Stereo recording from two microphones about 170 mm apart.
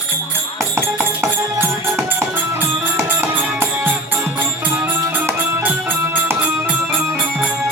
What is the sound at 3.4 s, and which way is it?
Music, 10° right (ahead or behind).